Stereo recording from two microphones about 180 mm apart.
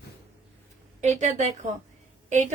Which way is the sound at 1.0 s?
40° right (ahead or behind).